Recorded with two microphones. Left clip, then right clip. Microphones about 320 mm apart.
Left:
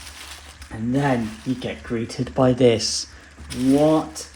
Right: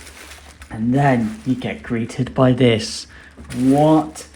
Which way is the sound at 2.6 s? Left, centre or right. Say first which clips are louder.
Even; right.